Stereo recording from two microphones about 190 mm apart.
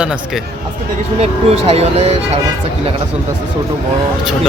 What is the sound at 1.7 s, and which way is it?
Speech, 30° right (ahead or behind).